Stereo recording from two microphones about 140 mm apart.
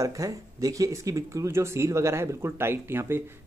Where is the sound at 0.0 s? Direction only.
25° right (ahead or behind).